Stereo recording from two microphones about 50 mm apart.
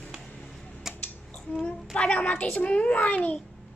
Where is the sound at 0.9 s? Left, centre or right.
Centre.